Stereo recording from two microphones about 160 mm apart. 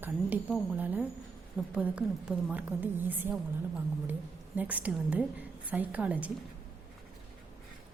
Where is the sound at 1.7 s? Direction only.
5° right (ahead or behind).